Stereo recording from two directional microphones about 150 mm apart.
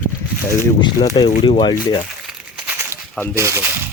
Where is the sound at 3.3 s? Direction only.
15° right (ahead or behind).